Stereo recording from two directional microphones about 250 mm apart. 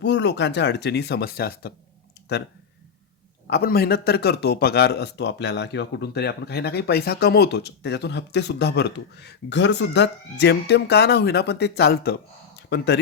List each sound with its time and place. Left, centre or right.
0.0 s a man's voice: left
3.4 s a man's voice: left